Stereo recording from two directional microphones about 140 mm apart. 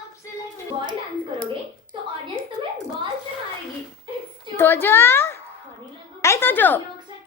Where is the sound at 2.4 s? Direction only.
40° right (ahead or behind).